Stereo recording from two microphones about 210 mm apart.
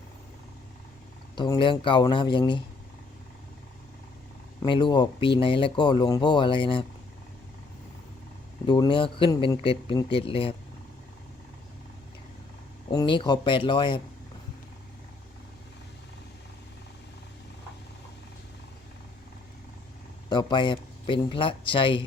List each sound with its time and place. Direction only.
1.4 s speech: 20° left (ahead or behind)
4.6 s speech: 20° left (ahead or behind)
8.6 s speech: 20° left (ahead or behind)
12.9 s speech: 20° left (ahead or behind)
20.3 s speech: 20° left (ahead or behind)